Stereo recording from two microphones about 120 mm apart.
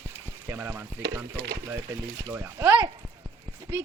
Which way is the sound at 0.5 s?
15° right (ahead or behind).